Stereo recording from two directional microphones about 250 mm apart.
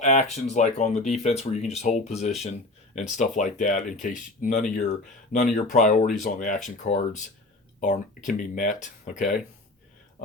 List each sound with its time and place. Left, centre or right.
0.0 s speech: left